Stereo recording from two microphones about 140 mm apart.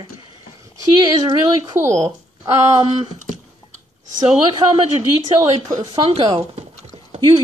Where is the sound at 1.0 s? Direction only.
30° right (ahead or behind).